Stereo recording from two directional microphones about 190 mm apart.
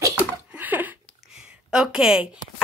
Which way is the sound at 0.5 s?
10° right (ahead or behind).